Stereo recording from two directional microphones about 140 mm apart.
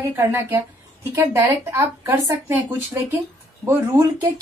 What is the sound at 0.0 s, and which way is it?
Speech, 20° right (ahead or behind).